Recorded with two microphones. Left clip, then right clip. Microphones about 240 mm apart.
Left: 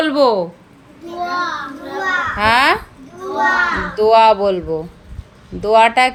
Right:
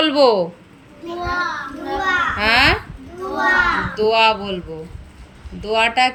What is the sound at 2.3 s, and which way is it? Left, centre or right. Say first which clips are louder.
Speech: left 3 dB; centre.